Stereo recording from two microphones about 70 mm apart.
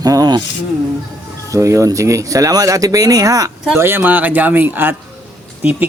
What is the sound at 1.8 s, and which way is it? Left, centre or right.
Speech, right.